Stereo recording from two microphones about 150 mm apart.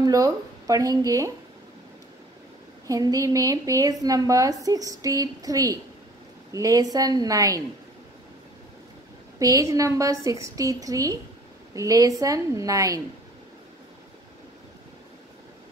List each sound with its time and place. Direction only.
0.0 s speech: 25° right (ahead or behind)
2.9 s a woman's voice: 25° right (ahead or behind)
9.4 s a woman's voice: 20° right (ahead or behind)